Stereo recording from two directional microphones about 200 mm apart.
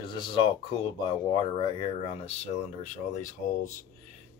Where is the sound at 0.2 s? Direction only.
25° left (ahead or behind); by 3.3 s 40° left (ahead or behind).